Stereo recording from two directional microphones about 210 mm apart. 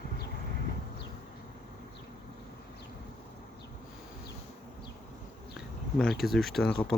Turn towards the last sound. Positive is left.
turn(degrees=5)  # may be behind; listen again after turning